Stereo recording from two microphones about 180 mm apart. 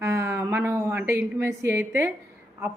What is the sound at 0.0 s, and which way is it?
A woman's voice, 15° right (ahead or behind).